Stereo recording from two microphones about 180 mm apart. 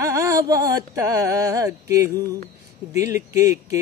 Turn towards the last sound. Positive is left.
turn(degrees=-20)  # may be behind; listen again after turning